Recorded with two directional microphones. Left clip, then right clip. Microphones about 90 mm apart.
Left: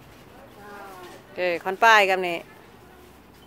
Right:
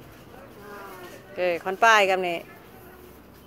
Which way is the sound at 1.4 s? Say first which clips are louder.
Even; 55° left (ahead or behind).